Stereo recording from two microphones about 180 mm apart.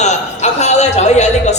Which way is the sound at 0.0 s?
40° left (ahead or behind).